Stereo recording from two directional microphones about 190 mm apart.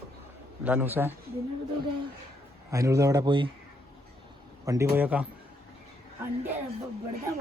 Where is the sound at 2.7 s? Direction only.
15° right (ahead or behind).